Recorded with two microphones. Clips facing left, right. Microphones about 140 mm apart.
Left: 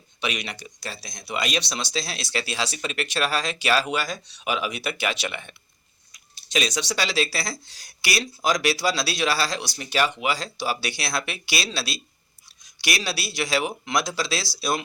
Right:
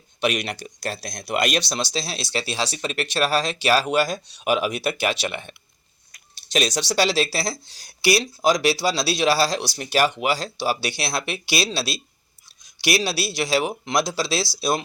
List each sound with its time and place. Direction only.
0.2 s speech: 40° right (ahead or behind)
1.6 s speech: 35° right (ahead or behind)
6.7 s speech: 35° right (ahead or behind)